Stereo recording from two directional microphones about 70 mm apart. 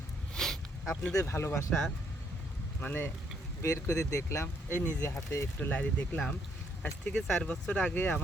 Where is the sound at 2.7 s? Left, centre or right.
Left.